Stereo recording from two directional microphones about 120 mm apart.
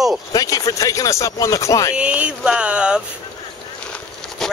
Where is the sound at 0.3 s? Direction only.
30° left (ahead or behind).